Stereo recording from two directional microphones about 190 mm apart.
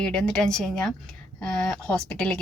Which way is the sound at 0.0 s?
5° left (ahead or behind).